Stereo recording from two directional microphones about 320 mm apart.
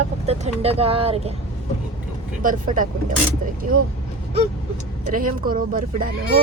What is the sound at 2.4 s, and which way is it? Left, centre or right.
Speech, right.